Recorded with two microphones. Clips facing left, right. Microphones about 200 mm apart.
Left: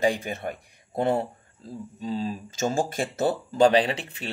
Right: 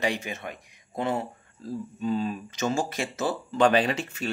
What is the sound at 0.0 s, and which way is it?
Speech, 50° left (ahead or behind).